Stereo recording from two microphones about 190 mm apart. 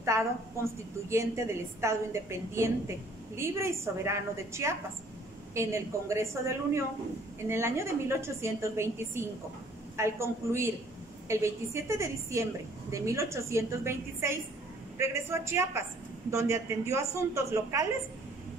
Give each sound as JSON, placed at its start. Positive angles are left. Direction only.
{"t": 0.0, "sound": "a woman's voice", "side_deg": -15}